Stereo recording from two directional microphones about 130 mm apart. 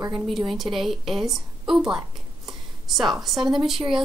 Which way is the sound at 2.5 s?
Centre (ahead or behind).